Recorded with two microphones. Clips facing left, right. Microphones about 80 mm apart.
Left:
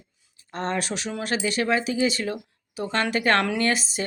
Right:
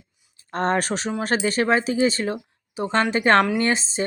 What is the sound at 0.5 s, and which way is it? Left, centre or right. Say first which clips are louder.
Speech: right 5 dB; right.